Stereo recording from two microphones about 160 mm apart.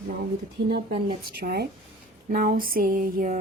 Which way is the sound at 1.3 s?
80° right.